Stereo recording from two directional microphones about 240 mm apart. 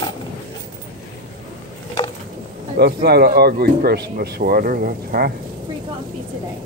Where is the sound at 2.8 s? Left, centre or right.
Right.